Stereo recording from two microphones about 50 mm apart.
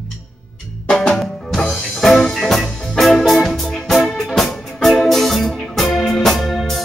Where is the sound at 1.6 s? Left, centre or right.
Centre.